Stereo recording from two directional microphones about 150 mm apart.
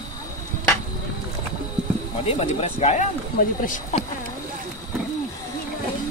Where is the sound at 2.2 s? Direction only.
45° left (ahead or behind).